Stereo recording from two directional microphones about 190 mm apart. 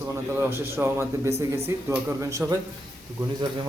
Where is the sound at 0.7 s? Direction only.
10° right (ahead or behind).